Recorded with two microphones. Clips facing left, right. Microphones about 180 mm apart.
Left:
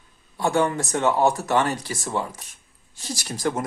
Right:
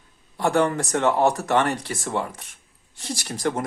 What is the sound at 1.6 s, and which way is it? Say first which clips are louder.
Speech: right 1 dB; 55° right (ahead or behind).